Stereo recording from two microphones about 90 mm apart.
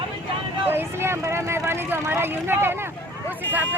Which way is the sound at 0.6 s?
25° right (ahead or behind).